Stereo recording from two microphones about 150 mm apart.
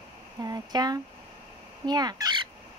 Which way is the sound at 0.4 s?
25° right (ahead or behind).